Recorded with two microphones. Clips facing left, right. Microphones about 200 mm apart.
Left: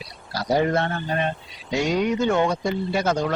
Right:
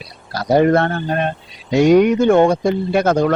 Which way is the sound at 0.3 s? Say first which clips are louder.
Right 8 dB; 60° right (ahead or behind).